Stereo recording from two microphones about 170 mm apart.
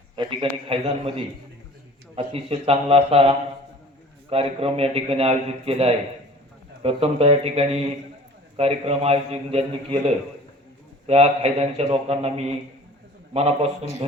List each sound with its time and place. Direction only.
0.2 s a man's voice: 30° right (ahead or behind)